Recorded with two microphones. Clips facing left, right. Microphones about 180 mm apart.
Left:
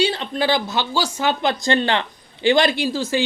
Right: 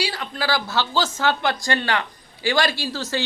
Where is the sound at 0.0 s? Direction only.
25° left (ahead or behind).